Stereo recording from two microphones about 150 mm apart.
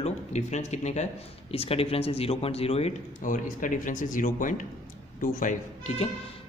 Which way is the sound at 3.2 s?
60° left (ahead or behind).